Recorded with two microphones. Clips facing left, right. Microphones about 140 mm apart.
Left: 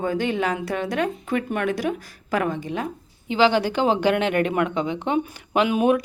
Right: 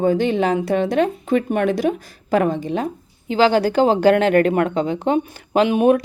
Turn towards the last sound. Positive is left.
turn(degrees=-30)  # may be behind; listen again after turning